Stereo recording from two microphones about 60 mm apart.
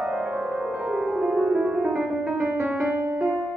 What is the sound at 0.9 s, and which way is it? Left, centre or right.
Piano, centre.